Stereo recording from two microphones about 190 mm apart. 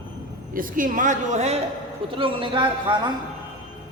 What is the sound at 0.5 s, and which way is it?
A woman's voice, 45° right (ahead or behind).